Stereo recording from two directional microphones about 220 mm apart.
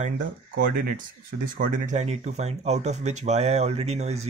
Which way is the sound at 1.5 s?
35° right (ahead or behind).